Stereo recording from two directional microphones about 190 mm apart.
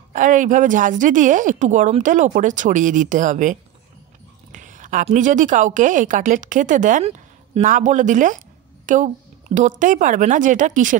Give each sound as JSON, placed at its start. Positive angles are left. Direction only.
{"t": 0.1, "sound": "a woman's voice", "side_deg": -40}